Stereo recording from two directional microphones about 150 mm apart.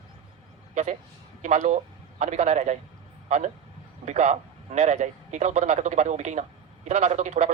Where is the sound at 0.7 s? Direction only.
50° right (ahead or behind).